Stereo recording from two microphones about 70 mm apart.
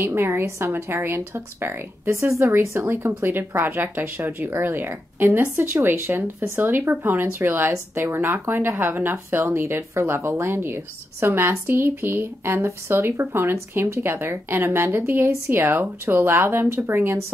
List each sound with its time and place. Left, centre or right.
0.0 s speech: right